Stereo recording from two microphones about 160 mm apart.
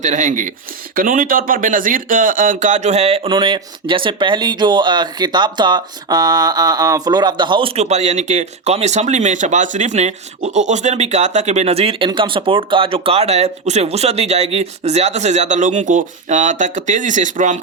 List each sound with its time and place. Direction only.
0.0 s speech: 50° right (ahead or behind); by 7.7 s 30° right (ahead or behind)
7.8 s speech: 45° right (ahead or behind)